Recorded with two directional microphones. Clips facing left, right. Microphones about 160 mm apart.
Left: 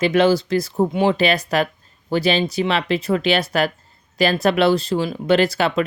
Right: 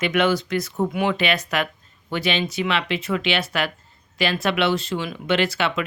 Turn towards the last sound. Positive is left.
turn(degrees=35)  # may be behind; listen again after turning